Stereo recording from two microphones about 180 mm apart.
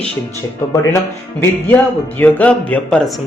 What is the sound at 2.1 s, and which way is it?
Speech, 10° left (ahead or behind).